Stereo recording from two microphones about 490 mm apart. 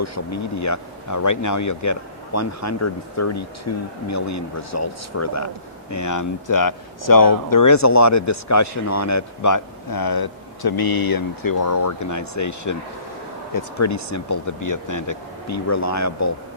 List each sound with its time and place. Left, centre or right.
0.0 s speech: left